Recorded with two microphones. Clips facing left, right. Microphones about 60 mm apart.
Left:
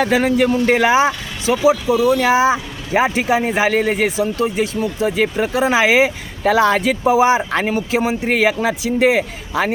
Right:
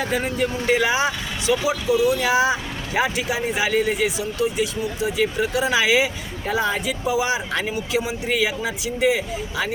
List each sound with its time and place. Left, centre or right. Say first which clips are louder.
0.0 s speech: left 8 dB; left
0.4 s speech: left 6 dB; left
6.4 s speech: left 9 dB; left
6.8 s speech: left 9 dB; left